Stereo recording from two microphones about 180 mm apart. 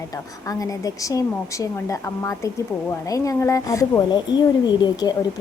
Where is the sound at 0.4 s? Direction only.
20° left (ahead or behind).